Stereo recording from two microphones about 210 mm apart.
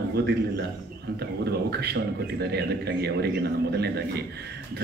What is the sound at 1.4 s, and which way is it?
A man's voice, 50° right (ahead or behind).